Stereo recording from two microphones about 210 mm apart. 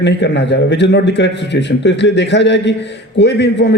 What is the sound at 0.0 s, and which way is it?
A man's voice, 55° left (ahead or behind).